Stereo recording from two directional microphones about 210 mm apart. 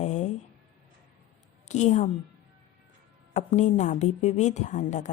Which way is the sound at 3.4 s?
35° left (ahead or behind).